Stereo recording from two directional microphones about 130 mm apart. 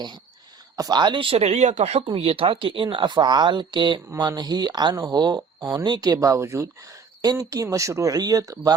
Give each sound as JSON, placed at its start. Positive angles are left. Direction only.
{"t": 0.8, "sound": "speech", "side_deg": -35}